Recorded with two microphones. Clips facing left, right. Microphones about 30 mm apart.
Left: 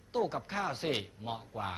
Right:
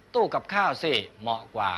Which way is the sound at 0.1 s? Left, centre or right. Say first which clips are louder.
Right 9 dB; right.